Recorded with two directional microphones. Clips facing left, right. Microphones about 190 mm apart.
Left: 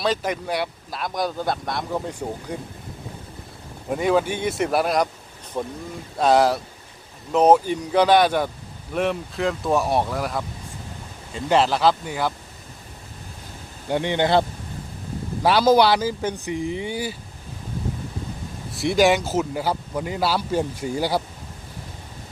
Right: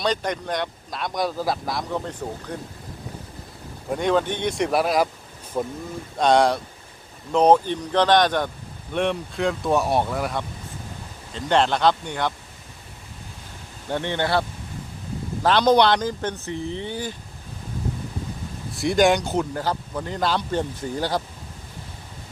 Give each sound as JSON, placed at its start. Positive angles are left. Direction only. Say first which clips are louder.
{"t": 0.0, "sound": "speech", "louder": "left 1 dB", "side_deg": 5}
{"t": 2.0, "sound": "a man's voice", "louder": "left 2 dB", "side_deg": 10}
{"t": 3.9, "sound": "a man's voice", "louder": "left 1 dB", "side_deg": 5}
{"t": 13.9, "sound": "a man's voice", "louder": "left 4 dB", "side_deg": 15}
{"t": 15.4, "sound": "a man's voice", "louder": "left 1 dB", "side_deg": 5}
{"t": 18.8, "sound": "a man's voice", "louder": "even", "side_deg": 0}